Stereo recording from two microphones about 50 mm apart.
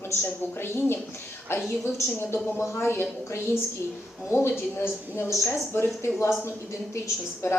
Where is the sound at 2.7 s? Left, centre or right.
Left.